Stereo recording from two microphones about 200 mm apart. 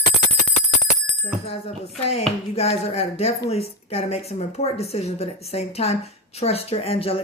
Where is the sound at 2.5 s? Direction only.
30° left (ahead or behind).